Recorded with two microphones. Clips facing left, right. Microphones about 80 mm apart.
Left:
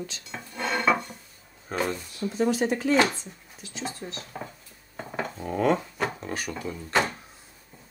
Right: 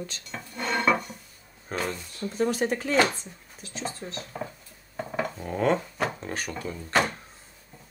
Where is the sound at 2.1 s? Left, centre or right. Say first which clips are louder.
Even; right.